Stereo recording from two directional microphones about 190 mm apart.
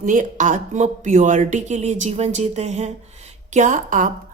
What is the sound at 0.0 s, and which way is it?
Speech, 45° right (ahead or behind).